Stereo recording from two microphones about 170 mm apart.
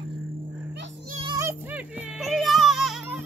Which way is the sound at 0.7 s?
80° right.